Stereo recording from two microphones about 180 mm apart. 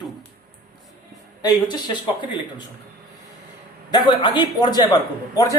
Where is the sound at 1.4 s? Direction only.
20° left (ahead or behind).